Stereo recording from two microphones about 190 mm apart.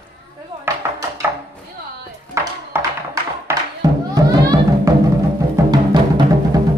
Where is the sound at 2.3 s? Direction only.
15° right (ahead or behind).